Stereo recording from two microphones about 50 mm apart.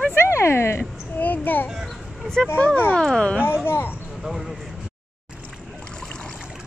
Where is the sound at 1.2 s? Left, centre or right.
Left.